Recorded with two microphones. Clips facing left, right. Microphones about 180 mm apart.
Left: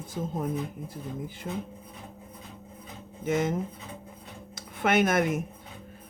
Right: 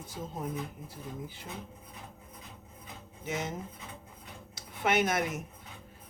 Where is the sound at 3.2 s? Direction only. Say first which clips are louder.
Left 9 dB; 50° left (ahead or behind).